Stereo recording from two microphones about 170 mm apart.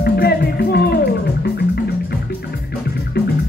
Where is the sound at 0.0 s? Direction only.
65° left (ahead or behind).